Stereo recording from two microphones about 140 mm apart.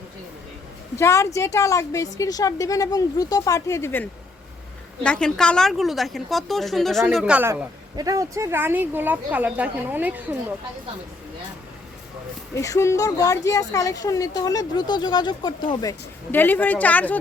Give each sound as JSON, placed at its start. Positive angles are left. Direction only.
{"t": 0.9, "sound": "a woman's voice", "side_deg": 20}
{"t": 7.4, "sound": "speech", "side_deg": -25}
{"t": 12.5, "sound": "speech", "side_deg": 20}
{"t": 16.3, "sound": "speech", "side_deg": 15}